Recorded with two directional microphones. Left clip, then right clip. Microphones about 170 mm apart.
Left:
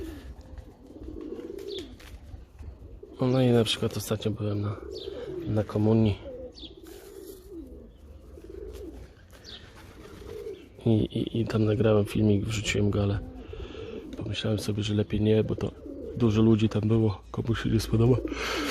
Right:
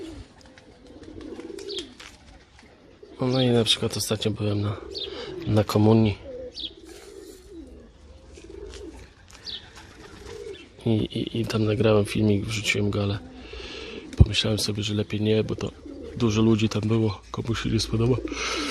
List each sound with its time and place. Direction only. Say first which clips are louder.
3.2 s speech: right 1 dB; centre (ahead or behind); by 4.9 s 15° right (ahead or behind)
5.1 s bird: right 5 dB; 20° right (ahead or behind)
10.8 s speech: right 1 dB; centre (ahead or behind)
13.5 s bird: right 3 dB; 10° right (ahead or behind)
14.2 s a sound: right 7 dB; 10° right (ahead or behind)
14.6 s speech: right 3 dB; centre (ahead or behind)